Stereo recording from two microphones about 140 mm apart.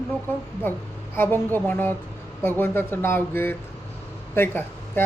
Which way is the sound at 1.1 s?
15° left (ahead or behind).